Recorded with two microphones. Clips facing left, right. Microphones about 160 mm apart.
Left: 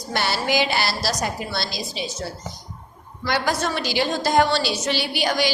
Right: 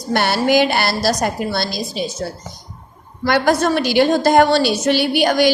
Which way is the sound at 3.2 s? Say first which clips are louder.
Right 8 dB; 55° right (ahead or behind).